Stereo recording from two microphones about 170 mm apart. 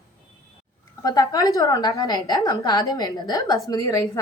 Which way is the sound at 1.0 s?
20° left (ahead or behind).